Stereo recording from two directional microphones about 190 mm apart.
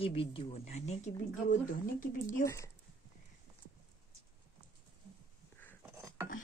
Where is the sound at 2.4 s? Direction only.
15° left (ahead or behind).